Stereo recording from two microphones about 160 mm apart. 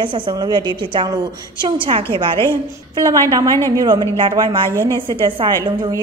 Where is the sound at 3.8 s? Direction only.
25° right (ahead or behind).